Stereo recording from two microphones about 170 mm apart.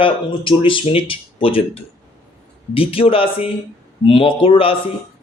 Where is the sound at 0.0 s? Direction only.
30° left (ahead or behind).